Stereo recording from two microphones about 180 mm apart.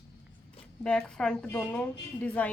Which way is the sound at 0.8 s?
5° left (ahead or behind).